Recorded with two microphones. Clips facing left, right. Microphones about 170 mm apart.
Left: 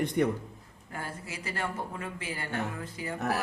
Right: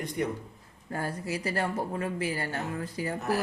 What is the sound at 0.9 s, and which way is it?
A woman's voice, 40° right (ahead or behind).